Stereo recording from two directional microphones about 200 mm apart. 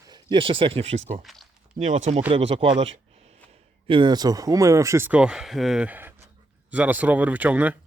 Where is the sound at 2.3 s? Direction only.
30° right (ahead or behind).